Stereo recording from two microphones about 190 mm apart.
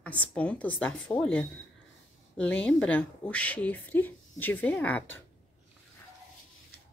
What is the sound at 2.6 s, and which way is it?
Speech, 5° left (ahead or behind).